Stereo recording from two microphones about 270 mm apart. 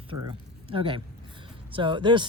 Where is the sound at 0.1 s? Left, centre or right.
Centre.